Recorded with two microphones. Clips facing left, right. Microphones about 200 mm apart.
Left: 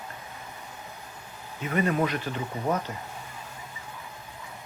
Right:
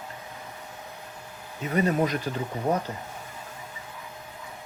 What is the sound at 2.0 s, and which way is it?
Speech, 40° right (ahead or behind).